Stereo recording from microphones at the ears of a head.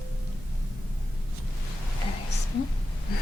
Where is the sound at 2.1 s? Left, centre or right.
Left.